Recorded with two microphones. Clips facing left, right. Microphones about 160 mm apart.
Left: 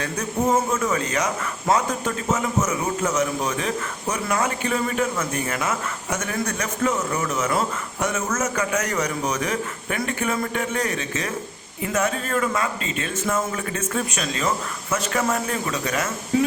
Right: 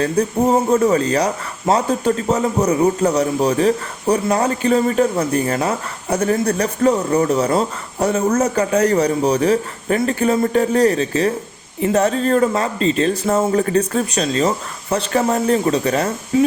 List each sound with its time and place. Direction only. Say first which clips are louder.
0.0 s speech: right 7 dB; 35° right (ahead or behind)